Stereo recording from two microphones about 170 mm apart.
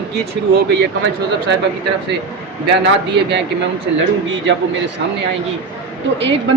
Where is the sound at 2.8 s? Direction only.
90° right.